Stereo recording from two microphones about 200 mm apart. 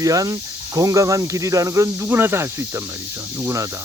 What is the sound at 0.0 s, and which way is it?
Speech, 15° right (ahead or behind).